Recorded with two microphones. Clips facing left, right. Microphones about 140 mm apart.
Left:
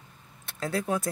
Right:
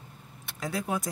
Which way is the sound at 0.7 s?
15° right (ahead or behind).